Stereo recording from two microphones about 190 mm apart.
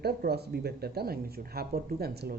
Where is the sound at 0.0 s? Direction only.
55° right (ahead or behind).